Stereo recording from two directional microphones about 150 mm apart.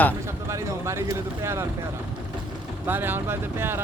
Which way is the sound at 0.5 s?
20° right (ahead or behind).